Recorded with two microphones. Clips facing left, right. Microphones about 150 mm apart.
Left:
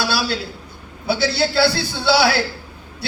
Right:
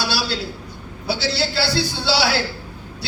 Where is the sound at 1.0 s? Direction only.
55° left (ahead or behind).